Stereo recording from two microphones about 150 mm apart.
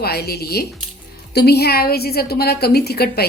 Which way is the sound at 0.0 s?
90° left.